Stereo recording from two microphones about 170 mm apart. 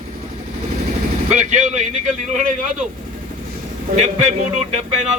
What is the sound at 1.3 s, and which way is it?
Speech, 45° right (ahead or behind).